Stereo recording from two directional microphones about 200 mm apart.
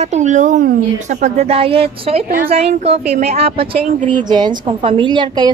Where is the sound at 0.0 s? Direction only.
35° right (ahead or behind).